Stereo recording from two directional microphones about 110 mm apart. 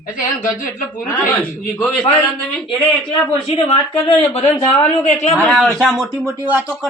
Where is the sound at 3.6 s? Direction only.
60° left (ahead or behind).